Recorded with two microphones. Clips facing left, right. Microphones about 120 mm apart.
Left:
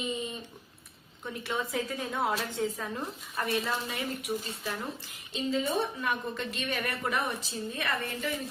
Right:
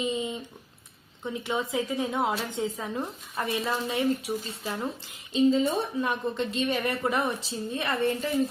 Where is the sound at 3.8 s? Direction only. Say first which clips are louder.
Right 8 dB; 30° right (ahead or behind).